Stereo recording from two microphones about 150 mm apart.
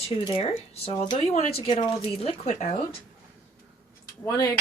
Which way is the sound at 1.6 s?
35° left (ahead or behind).